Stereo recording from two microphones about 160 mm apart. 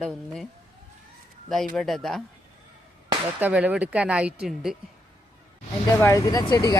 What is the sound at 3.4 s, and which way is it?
A woman's voice, 10° right (ahead or behind).